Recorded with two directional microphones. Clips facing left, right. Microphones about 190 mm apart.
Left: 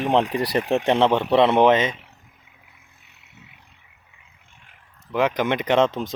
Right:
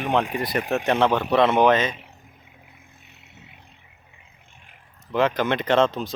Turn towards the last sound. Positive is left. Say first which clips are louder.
# left 1 dB
turn(degrees=20)  # may be behind; listen again after turning